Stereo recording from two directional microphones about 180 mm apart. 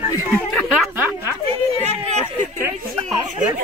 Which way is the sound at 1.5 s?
40° right (ahead or behind).